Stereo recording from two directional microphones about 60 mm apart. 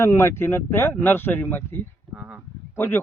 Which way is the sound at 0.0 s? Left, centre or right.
Left.